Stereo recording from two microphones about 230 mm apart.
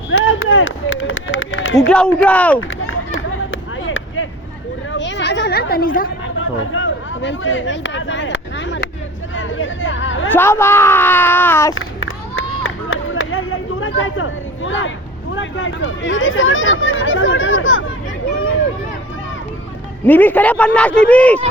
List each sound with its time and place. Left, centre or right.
0.1 s a sound: left
1.9 s a man's voice: centre
2.6 s run: left
3.8 s a sound: left
6.2 s speech: left
9.3 s hubbub: left
10.2 s speech: centre
11.7 s a sound: left
20.1 s speech: centre